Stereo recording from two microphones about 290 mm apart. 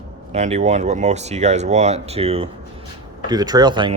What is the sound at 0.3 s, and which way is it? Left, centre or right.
Speech, right.